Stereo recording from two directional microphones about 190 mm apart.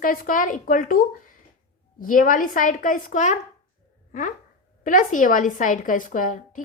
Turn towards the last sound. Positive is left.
turn(degrees=45)  # may be behind; listen again after turning